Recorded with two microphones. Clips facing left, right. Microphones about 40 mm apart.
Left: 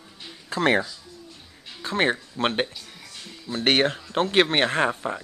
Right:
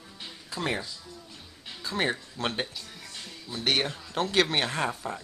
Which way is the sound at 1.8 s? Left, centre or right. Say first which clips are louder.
Left 6 dB; left.